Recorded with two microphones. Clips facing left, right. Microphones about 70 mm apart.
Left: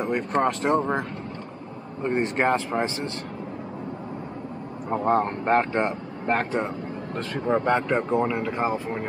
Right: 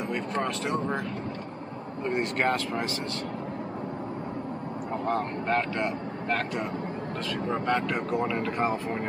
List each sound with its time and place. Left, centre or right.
0.0 s speech: left
2.0 s speech: left
4.9 s speech: left
8.3 s speech: centre